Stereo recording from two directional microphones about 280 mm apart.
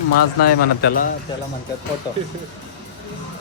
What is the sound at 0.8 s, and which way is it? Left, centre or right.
Speech, left.